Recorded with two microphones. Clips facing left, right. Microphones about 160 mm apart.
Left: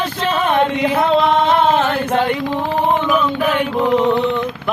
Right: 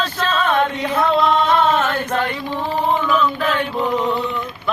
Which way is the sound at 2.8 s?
15° left (ahead or behind).